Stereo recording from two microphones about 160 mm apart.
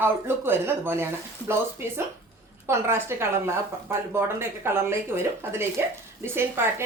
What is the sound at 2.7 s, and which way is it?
Speech, 15° right (ahead or behind).